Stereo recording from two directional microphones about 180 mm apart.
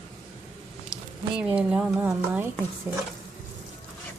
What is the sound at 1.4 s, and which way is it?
Speech, 5° right (ahead or behind).